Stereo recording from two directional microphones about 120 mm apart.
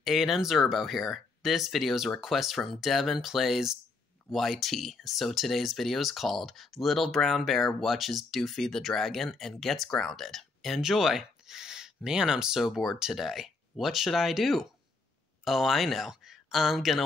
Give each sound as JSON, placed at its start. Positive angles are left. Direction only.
{"t": 0.0, "sound": "speech", "side_deg": 0}